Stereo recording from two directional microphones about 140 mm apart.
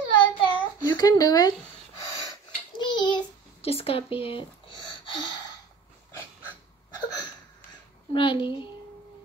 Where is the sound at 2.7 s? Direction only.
35° left (ahead or behind).